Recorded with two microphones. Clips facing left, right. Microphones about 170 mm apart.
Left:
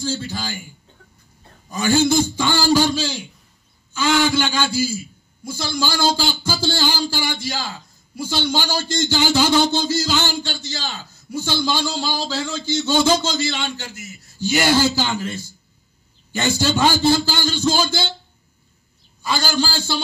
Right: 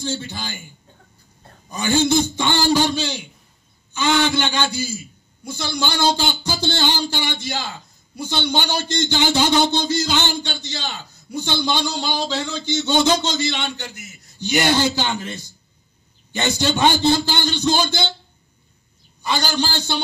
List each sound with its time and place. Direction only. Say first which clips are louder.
0.0 s a man's voice: left 2 dB; 20° right (ahead or behind)
1.7 s a man's voice: left 1 dB; 20° right (ahead or behind)
19.2 s a man's voice: even; 20° right (ahead or behind)